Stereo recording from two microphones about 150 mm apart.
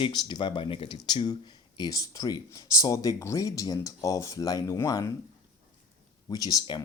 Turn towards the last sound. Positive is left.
turn(degrees=30)  # may be behind; listen again after turning